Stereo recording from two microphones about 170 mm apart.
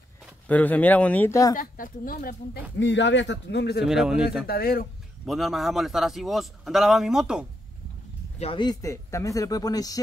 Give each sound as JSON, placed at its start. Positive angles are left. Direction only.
{"t": 0.5, "sound": "speech", "side_deg": 10}
{"t": 1.6, "sound": "speech", "side_deg": 55}
{"t": 2.8, "sound": "speech", "side_deg": 90}
{"t": 3.8, "sound": "a man's voice", "side_deg": -5}
{"t": 4.5, "sound": "speech", "side_deg": 60}
{"t": 5.2, "sound": "a man's voice", "side_deg": 0}
{"t": 8.4, "sound": "speech", "side_deg": 30}